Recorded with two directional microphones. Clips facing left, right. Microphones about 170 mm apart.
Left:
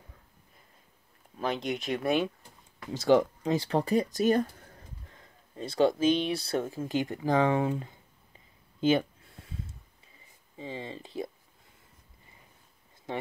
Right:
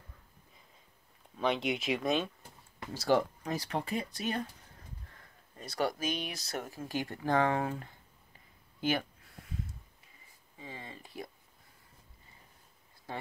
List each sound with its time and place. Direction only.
1.4 s speech: centre (ahead or behind)
2.9 s speech: 20° left (ahead or behind); by 4.5 s 40° left (ahead or behind)
5.1 s speech: 25° left (ahead or behind)
8.8 s a sound: 25° left (ahead or behind)
10.6 s speech: 25° left (ahead or behind)